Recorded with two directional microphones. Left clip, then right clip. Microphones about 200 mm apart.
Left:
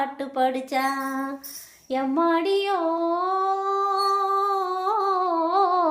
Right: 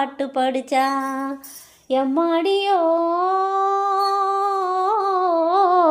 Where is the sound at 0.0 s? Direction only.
30° right (ahead or behind).